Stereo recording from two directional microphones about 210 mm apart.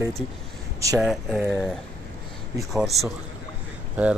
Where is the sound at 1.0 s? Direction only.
Centre (ahead or behind).